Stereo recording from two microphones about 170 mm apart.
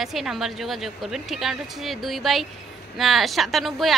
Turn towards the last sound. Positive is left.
turn(degrees=0)  # may be behind; listen again after turning